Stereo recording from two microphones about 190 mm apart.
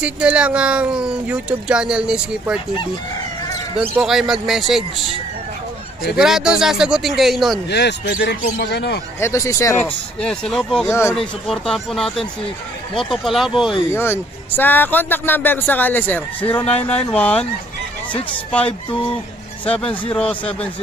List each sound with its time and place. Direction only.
0.0 s speech: 5° right (ahead or behind)
3.9 s speech: centre (ahead or behind)
6.1 s speech: 5° right (ahead or behind)
7.7 s speech: 60° left (ahead or behind)
9.2 s a man's voice: 15° left (ahead or behind)
10.9 s a man's voice: 15° left (ahead or behind)
11.1 s speech: centre (ahead or behind)
13.7 s a man's voice: 15° left (ahead or behind)
18.5 s a man's voice: 5° left (ahead or behind)